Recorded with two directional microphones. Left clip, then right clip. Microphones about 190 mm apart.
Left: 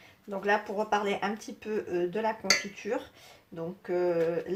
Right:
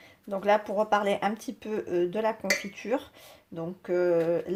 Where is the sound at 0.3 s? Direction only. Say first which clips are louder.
Right 4 dB; 50° right (ahead or behind).